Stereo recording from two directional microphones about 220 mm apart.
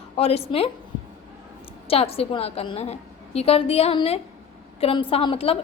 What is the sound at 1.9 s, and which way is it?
A woman's voice, 25° left (ahead or behind).